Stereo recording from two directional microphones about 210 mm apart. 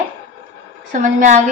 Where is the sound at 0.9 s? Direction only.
35° right (ahead or behind).